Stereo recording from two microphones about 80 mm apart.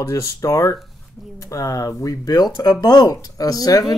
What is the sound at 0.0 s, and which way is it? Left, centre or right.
Speech, left.